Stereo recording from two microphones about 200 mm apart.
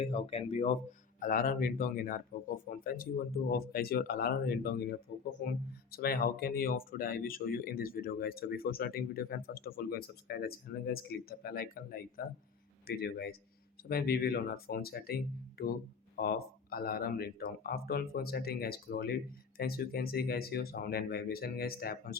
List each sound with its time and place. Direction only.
0.0 s speech: 30° left (ahead or behind)
1.2 s speech: 45° left (ahead or behind)